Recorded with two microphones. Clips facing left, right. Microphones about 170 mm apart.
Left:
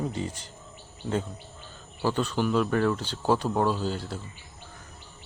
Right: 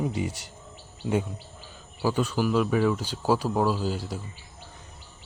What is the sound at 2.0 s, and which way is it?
Speech, 10° right (ahead or behind).